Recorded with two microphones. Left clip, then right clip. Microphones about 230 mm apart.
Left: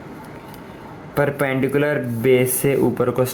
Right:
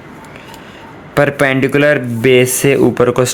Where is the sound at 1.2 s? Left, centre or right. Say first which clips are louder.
Right 8 dB; right.